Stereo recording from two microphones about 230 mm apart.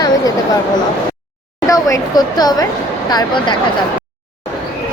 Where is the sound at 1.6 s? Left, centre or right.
Centre.